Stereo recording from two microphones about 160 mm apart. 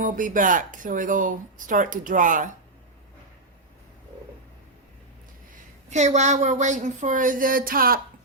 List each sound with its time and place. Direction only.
0.0 s speech: 55° right (ahead or behind)
5.9 s speech: 45° right (ahead or behind); by 8.0 s 65° right (ahead or behind)